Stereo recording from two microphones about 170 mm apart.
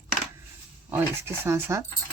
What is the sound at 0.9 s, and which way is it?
Speech, 10° right (ahead or behind).